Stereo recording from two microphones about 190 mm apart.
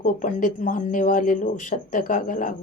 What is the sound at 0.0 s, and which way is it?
Speech, 45° left (ahead or behind).